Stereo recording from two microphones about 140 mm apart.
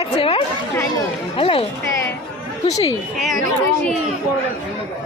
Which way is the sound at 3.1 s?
Centre (ahead or behind).